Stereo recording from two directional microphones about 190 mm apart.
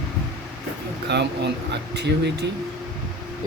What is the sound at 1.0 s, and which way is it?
Speech, 60° right (ahead or behind).